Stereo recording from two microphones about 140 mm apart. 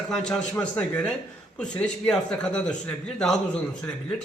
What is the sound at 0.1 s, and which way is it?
A man's voice, 5° left (ahead or behind).